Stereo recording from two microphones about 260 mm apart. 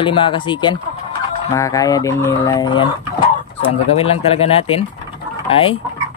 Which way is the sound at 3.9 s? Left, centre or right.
Left.